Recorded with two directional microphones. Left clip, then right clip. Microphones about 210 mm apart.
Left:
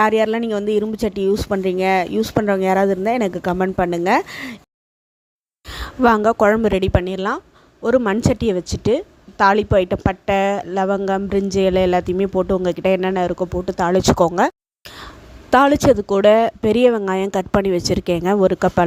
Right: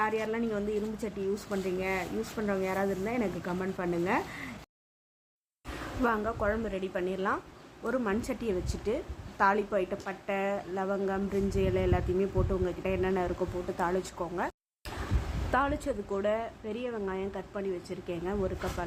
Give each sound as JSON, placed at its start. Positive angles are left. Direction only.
{"t": 0.0, "sound": "a woman's voice", "side_deg": 50}
{"t": 6.0, "sound": "a woman's voice", "side_deg": 50}
{"t": 15.5, "sound": "speech", "side_deg": 55}